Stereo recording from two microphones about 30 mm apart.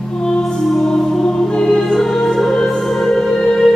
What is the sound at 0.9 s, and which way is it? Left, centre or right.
Music, centre.